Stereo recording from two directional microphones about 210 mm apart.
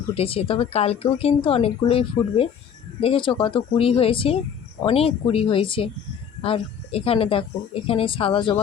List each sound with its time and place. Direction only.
0.1 s a woman's voice: 30° left (ahead or behind)